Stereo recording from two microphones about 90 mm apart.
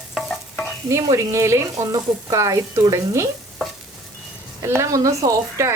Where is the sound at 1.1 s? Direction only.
35° right (ahead or behind).